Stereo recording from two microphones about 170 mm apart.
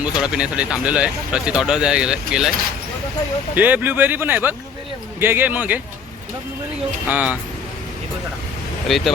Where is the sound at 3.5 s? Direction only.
10° right (ahead or behind).